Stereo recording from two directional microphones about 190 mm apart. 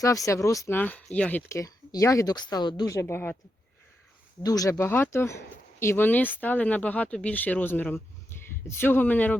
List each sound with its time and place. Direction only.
0.0 s speech: 15° left (ahead or behind)
4.4 s speech: 20° left (ahead or behind)